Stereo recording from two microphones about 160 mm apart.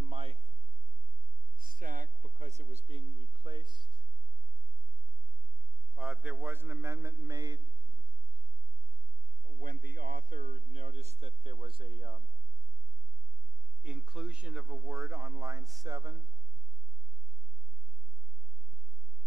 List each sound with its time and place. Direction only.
0.0 s a sound: 35° right (ahead or behind)
1.6 s speech: 60° right (ahead or behind); by 3.9 s 30° right (ahead or behind)
5.9 s a man's voice: 5° right (ahead or behind); by 7.6 s 25° right (ahead or behind)
9.6 s a man's voice: 60° right (ahead or behind); by 12.2 s 30° right (ahead or behind)
13.8 s speech: 5° right (ahead or behind)
15.0 s speech: 20° right (ahead or behind)